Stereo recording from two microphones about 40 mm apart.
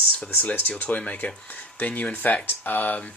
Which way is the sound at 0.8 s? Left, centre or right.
Left.